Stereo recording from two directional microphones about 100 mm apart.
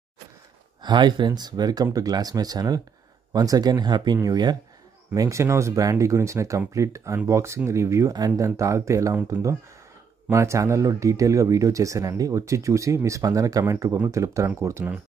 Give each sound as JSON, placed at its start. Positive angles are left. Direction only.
{"t": 0.8, "sound": "speech", "side_deg": -50}